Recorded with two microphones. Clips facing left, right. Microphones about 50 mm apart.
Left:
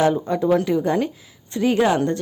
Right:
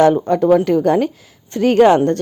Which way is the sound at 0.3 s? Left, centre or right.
Right.